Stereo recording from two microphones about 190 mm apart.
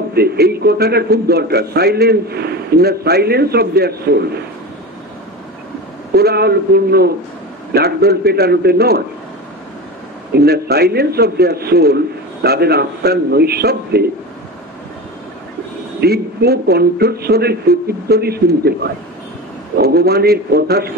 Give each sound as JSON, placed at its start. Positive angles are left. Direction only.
{"t": 0.1, "sound": "a man's voice", "side_deg": -55}
{"t": 6.1, "sound": "a man's voice", "side_deg": -55}
{"t": 10.3, "sound": "a man's voice", "side_deg": -55}
{"t": 16.0, "sound": "a man's voice", "side_deg": -55}